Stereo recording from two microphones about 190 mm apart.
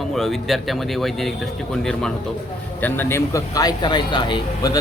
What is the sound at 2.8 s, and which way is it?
Speech, 10° left (ahead or behind).